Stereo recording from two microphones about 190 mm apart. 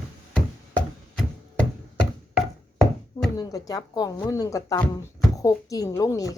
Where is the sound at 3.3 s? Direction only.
20° left (ahead or behind).